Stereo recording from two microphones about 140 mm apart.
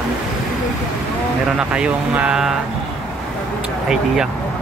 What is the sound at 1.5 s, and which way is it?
Speech, 5° right (ahead or behind).